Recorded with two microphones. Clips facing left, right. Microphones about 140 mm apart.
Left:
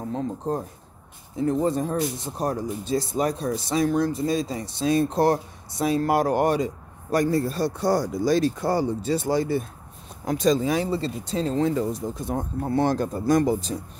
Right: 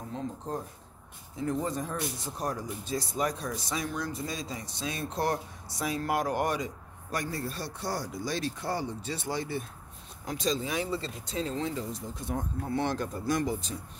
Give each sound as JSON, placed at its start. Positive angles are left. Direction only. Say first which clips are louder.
{"t": 1.4, "sound": "speech", "louder": "left 8 dB", "side_deg": 30}
{"t": 10.2, "sound": "speech", "louder": "left 10 dB", "side_deg": 50}
{"t": 12.3, "sound": "speech", "louder": "left 5 dB", "side_deg": 35}